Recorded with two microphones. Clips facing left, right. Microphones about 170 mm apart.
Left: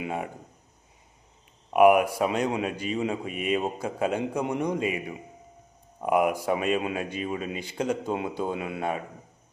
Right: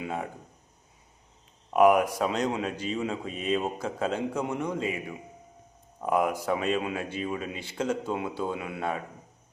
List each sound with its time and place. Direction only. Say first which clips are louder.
0.0 s speech: left 2 dB; 15° left (ahead or behind)
1.7 s a man's voice: left 2 dB; 10° left (ahead or behind)
6.0 s a man's voice: left 2 dB; 15° left (ahead or behind)